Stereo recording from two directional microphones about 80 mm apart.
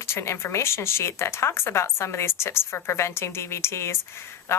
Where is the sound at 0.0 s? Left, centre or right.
Left.